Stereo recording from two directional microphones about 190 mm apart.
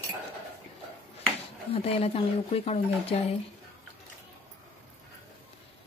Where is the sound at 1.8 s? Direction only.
30° left (ahead or behind).